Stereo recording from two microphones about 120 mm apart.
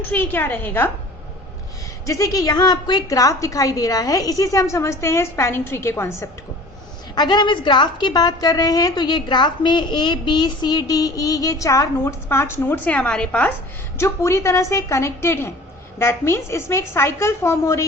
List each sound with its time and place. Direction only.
0.1 s a woman's voice: 15° left (ahead or behind)
2.0 s a woman's voice: 25° left (ahead or behind)
7.2 s a woman's voice: 40° left (ahead or behind); by 13.5 s 10° left (ahead or behind)
14.0 s a woman's voice: 25° left (ahead or behind)